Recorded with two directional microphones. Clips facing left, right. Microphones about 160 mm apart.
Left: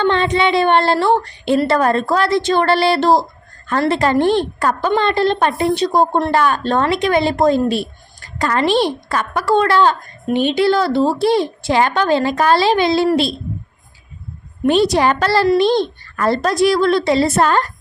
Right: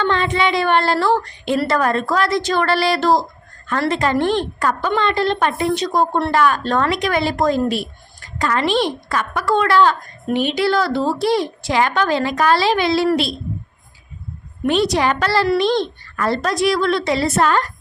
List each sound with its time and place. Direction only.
0.0 s a woman's voice: 25° left (ahead or behind)
14.7 s a woman's voice: 35° left (ahead or behind)